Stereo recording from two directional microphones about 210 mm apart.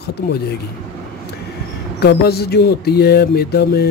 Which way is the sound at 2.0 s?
50° left (ahead or behind).